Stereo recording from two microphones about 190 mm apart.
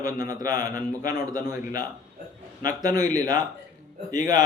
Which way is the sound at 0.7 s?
50° left (ahead or behind).